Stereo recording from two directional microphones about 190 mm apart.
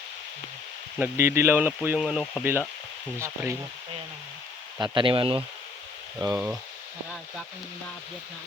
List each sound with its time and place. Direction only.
0.9 s speech: 10° right (ahead or behind)
4.8 s speech: 25° right (ahead or behind)
6.1 s speech: 15° right (ahead or behind)